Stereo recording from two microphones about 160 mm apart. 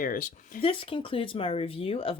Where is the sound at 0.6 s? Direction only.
35° left (ahead or behind).